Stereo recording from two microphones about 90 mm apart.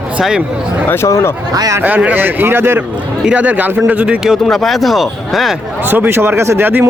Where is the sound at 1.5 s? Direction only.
45° right (ahead or behind).